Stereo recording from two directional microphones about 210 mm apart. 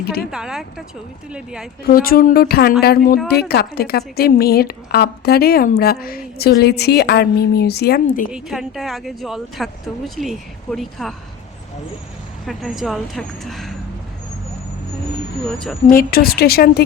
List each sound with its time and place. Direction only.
0.3 s speech: 5° right (ahead or behind)
1.8 s a woman's voice: 45° left (ahead or behind)
8.3 s speech: centre (ahead or behind)
12.5 s speech: centre (ahead or behind)
15.9 s a woman's voice: 45° left (ahead or behind)